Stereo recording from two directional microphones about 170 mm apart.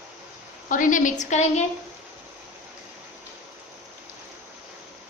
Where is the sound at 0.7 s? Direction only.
50° left (ahead or behind).